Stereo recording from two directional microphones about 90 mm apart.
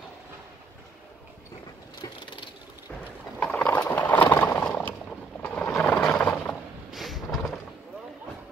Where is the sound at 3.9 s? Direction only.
20° left (ahead or behind).